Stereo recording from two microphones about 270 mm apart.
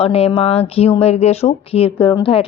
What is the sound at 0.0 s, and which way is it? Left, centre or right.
Speech, left.